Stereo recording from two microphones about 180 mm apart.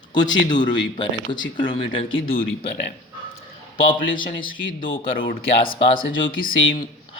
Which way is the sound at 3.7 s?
30° left (ahead or behind).